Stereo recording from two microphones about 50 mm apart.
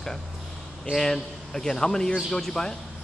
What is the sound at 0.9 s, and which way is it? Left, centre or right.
A man's voice, centre.